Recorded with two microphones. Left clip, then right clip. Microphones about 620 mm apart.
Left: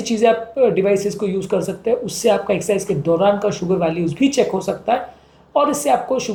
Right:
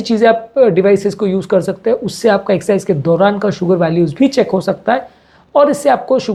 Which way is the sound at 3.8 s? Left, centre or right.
Right.